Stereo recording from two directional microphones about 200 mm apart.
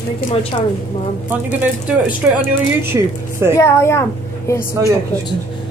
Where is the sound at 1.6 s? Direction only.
5° right (ahead or behind).